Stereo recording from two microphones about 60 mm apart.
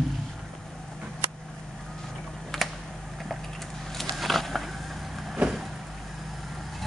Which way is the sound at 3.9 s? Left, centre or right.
Centre.